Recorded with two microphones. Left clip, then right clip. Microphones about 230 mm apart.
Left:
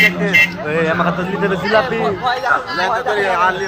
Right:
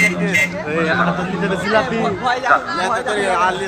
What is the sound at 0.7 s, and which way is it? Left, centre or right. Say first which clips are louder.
Speech: left 1 dB; left.